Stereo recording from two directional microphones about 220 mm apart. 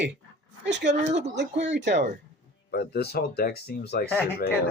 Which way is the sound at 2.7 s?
45° left (ahead or behind).